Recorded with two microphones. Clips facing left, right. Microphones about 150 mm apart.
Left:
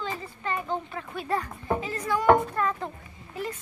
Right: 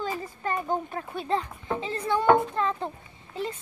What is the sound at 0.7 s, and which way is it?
Speech, 45° right (ahead or behind).